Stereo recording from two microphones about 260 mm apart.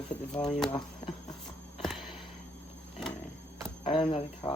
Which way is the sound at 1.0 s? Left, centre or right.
Left.